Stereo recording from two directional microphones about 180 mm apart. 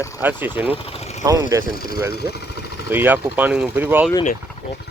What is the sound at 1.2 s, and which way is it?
Speech, 20° right (ahead or behind).